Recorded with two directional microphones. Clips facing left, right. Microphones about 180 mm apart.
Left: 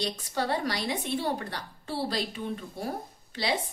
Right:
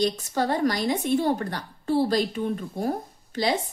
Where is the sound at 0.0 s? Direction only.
45° right (ahead or behind).